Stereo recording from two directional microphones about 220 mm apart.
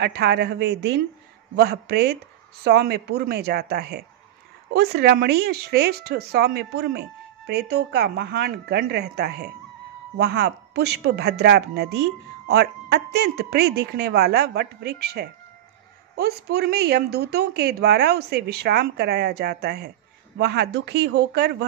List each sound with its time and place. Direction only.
0.0 s speech: 50° right (ahead or behind)